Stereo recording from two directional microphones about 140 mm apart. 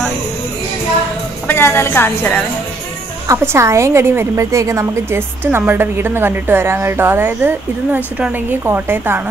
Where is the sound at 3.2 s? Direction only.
15° right (ahead or behind).